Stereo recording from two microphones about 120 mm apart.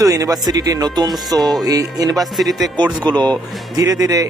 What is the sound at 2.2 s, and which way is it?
Speech, centre (ahead or behind).